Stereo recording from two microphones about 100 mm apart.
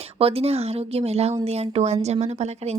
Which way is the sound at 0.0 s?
75° right (ahead or behind).